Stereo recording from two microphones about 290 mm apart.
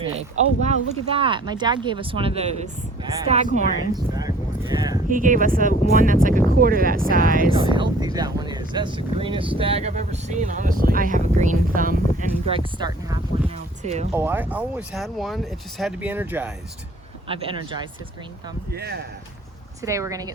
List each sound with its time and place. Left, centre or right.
0.0 s speech: right
5.0 s speech: right
7.6 s speech: centre
12.5 s speech: centre
14.1 s speech: centre
17.2 s speech: centre
18.7 s speech: right
19.8 s speech: centre